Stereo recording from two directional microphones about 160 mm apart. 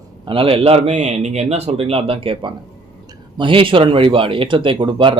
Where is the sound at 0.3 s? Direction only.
35° right (ahead or behind).